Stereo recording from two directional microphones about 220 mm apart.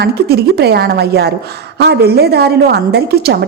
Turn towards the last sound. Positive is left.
turn(degrees=-45)  # may be behind; listen again after turning